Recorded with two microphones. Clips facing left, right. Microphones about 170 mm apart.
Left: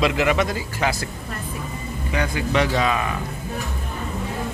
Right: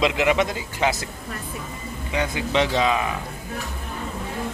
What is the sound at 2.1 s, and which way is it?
A man's voice, 20° right (ahead or behind).